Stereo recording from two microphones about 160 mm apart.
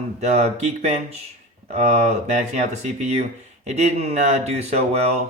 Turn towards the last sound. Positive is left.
turn(degrees=-40)  # may be behind; listen again after turning